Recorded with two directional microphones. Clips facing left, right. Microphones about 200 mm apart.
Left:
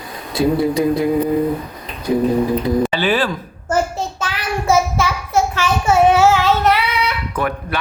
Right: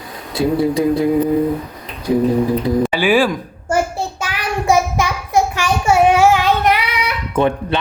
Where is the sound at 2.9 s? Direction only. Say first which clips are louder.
Right 3 dB; 10° right (ahead or behind).